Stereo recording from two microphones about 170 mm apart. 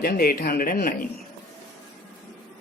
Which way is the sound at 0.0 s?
60° left (ahead or behind).